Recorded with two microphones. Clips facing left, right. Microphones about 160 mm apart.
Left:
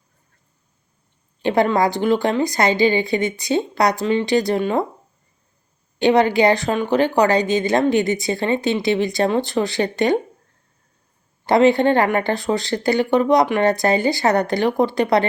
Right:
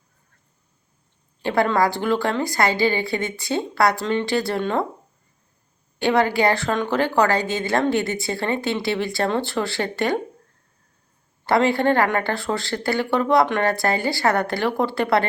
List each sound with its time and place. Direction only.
1.4 s speech: 20° left (ahead or behind)
6.0 s speech: 20° left (ahead or behind)
11.4 s speech: 20° left (ahead or behind)